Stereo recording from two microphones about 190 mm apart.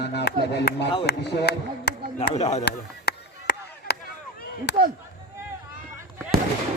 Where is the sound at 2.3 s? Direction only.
35° left (ahead or behind).